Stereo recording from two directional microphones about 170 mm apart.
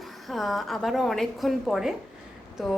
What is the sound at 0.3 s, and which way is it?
A woman's voice, centre (ahead or behind).